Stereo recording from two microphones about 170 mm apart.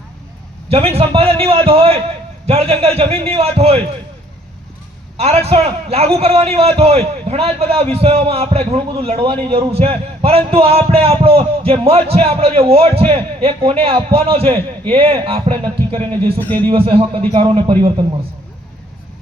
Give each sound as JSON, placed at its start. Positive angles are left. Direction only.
{"t": 0.7, "sound": "a man's voice", "side_deg": -35}
{"t": 5.1, "sound": "a man's voice", "side_deg": -40}
{"t": 16.4, "sound": "a man's voice", "side_deg": 10}
{"t": 16.6, "sound": "a man's voice", "side_deg": -30}